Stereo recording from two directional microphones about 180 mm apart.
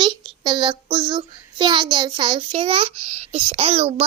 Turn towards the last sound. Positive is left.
turn(degrees=-35)  # may be behind; listen again after turning